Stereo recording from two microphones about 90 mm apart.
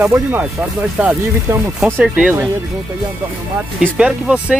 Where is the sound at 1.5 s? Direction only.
30° right (ahead or behind).